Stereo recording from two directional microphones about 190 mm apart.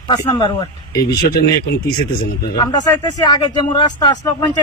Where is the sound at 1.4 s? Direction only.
55° left (ahead or behind).